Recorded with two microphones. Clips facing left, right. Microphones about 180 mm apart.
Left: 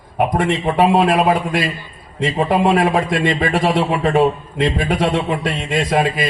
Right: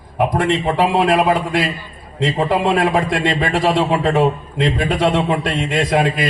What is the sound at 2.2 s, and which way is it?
A man's voice, 65° right (ahead or behind).